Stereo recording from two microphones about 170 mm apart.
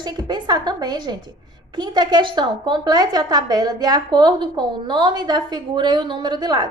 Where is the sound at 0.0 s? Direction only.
25° right (ahead or behind).